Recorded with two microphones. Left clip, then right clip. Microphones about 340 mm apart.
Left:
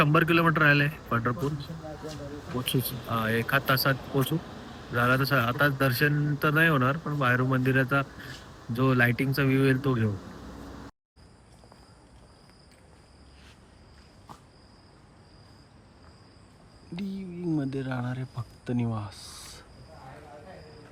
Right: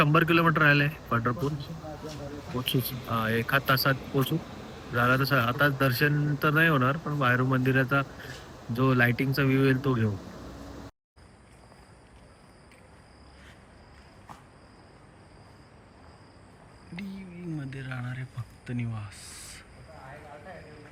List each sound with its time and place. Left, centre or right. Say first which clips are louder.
0.0 s speech: even; centre
2.0 s speech: even; right
2.6 s speech: even; centre
4.4 s a sound: even; right
4.9 s speech: even; centre
8.4 s a sound: right 2 dB; right
8.7 s speech: even; centre
16.9 s speech: left 4 dB; centre
19.2 s a sound: left 1 dB; centre